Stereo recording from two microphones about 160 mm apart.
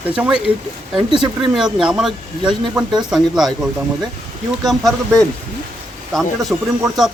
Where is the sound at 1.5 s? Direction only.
5° right (ahead or behind).